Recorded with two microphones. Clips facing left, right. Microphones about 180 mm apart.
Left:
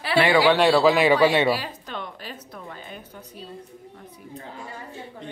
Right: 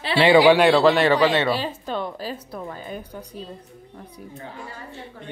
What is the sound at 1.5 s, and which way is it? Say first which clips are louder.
Speech: right 5 dB; 30° right (ahead or behind).